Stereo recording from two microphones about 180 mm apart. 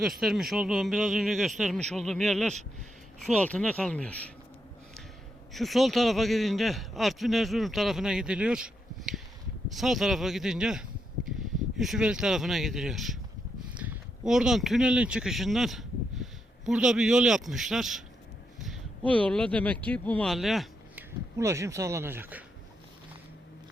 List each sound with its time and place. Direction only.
0.0 s a man's voice: centre (ahead or behind)
5.5 s a man's voice: centre (ahead or behind)
21.3 s speech: 15° right (ahead or behind)